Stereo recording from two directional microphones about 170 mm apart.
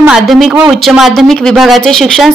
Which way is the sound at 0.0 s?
Centre (ahead or behind).